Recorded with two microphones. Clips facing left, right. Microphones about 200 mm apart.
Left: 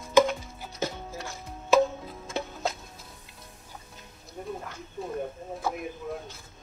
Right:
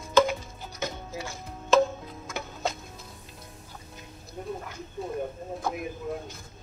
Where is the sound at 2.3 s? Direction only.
30° left (ahead or behind).